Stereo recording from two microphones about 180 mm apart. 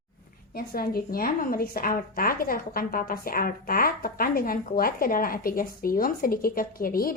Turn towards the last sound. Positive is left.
turn(degrees=55)  # may be behind; listen again after turning